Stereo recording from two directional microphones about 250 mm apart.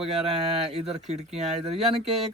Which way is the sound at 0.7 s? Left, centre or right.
Right.